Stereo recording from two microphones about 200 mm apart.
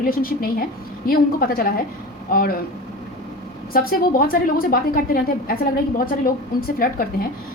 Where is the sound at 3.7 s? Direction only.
45° left (ahead or behind).